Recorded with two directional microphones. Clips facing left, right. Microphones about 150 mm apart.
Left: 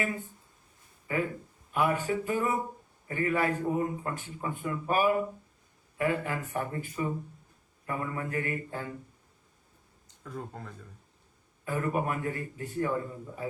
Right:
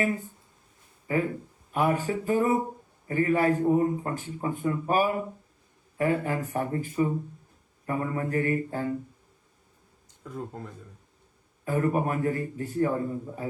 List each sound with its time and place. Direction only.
1.0 s a man's voice: 35° right (ahead or behind)
11.6 s a man's voice: 35° right (ahead or behind)